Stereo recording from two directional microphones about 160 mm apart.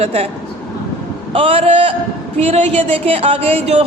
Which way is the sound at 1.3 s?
35° right (ahead or behind).